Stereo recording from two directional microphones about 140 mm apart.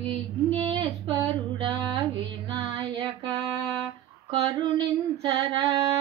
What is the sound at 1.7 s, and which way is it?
Music, 30° right (ahead or behind).